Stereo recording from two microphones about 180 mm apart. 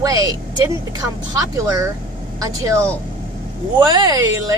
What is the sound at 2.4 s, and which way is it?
Speech, 20° right (ahead or behind).